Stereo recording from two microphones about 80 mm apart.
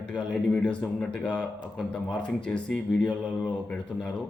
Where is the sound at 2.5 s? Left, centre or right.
Centre.